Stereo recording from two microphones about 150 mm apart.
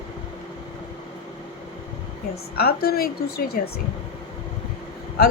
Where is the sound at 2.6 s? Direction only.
90° left.